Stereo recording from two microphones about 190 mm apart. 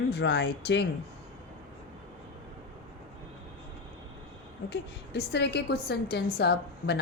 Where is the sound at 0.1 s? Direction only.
65° left (ahead or behind).